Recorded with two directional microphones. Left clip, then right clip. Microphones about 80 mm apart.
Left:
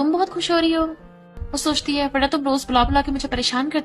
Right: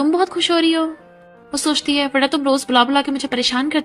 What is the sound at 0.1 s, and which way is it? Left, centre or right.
A woman's voice, right.